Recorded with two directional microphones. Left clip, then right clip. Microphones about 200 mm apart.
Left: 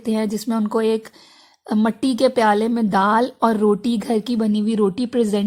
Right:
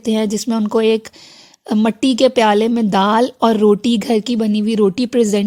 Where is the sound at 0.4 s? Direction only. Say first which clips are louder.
Right 5 dB; 30° right (ahead or behind).